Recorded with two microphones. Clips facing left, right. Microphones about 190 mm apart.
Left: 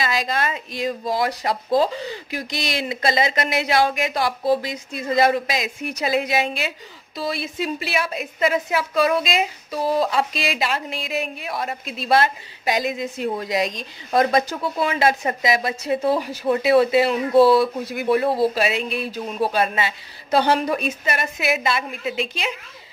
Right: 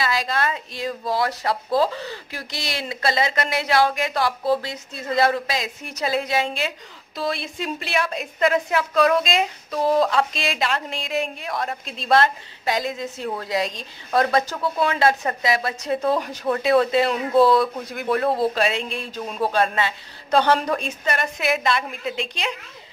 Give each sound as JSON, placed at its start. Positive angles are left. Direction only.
{"t": 0.0, "sound": "a woman's voice", "side_deg": 20}